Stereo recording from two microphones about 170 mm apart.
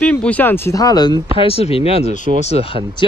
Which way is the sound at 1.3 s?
35° left (ahead or behind).